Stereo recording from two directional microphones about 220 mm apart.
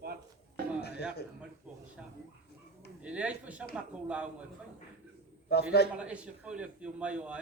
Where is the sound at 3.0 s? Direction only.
5° right (ahead or behind).